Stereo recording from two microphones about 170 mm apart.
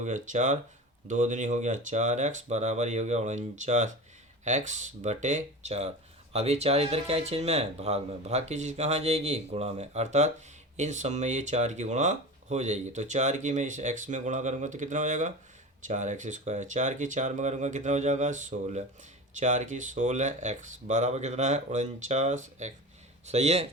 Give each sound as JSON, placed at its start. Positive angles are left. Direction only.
{"t": 0.0, "sound": "speech", "side_deg": -45}